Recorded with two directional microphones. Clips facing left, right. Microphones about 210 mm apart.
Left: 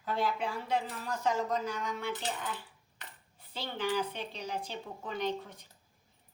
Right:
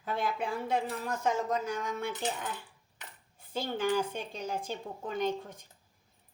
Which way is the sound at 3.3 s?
50° right (ahead or behind).